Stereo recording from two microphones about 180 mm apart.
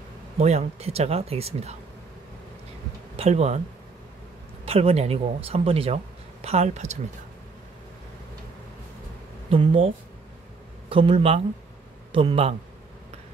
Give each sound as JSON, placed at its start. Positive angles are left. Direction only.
{"t": 0.4, "sound": "speech", "side_deg": -35}
{"t": 3.2, "sound": "speech", "side_deg": -35}
{"t": 4.6, "sound": "speech", "side_deg": -35}
{"t": 9.5, "sound": "speech", "side_deg": -30}
{"t": 10.9, "sound": "a man's voice", "side_deg": -30}